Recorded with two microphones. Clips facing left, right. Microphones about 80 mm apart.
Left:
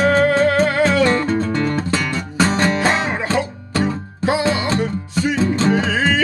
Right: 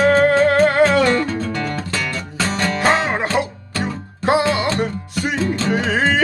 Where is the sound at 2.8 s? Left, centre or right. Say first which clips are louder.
Right 2 dB; right.